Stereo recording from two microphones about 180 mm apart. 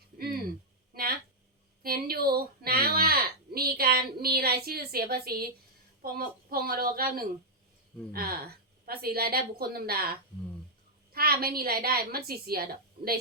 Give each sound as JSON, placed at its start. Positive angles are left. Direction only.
{"t": 1.8, "sound": "speech", "side_deg": -55}